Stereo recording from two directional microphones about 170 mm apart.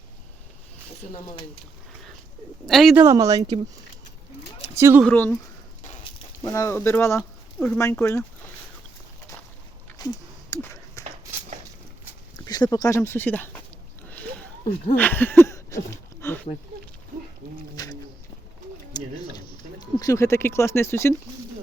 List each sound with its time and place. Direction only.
2.6 s speech: centre (ahead or behind)
2.9 s speech: 20° right (ahead or behind)
4.6 s speech: 15° right (ahead or behind)
5.0 s speech: 10° left (ahead or behind)
6.4 s speech: 15° left (ahead or behind)
10.0 s a sound: 25° left (ahead or behind)
12.5 s speech: 25° left (ahead or behind)
14.9 s a sound: 10° left (ahead or behind)
18.9 s speech: 25° left (ahead or behind)